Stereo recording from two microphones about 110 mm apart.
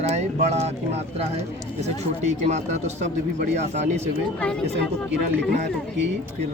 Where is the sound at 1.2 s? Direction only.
70° right (ahead or behind).